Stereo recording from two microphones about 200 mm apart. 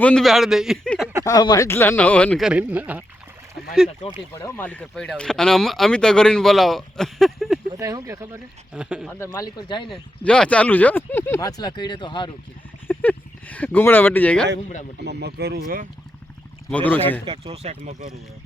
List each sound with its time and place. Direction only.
0.0 s speech: 5° left (ahead or behind)
1.2 s speech: 20° left (ahead or behind); by 3.0 s 5° right (ahead or behind)
4.4 s speech: 10° left (ahead or behind)
7.7 s speech: 15° right (ahead or behind)
8.7 s speech: 5° right (ahead or behind)
9.1 s speech: 15° left (ahead or behind)
9.9 s speech: 5° left (ahead or behind); by 12.3 s 25° left (ahead or behind)
12.9 s speech: 10° left (ahead or behind)
15.0 s speech: 55° right (ahead or behind)
16.6 s speech: 5° left (ahead or behind)
17.2 s speech: 30° right (ahead or behind)